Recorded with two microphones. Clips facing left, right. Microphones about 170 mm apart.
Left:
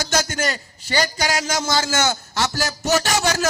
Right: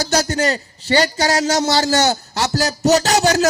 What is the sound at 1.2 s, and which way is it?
A man's voice, 40° right (ahead or behind).